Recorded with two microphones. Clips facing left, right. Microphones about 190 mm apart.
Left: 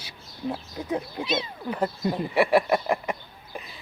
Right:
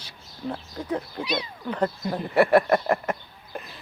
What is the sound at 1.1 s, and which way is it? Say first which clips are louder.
Speech: left 1 dB; 25° left (ahead or behind).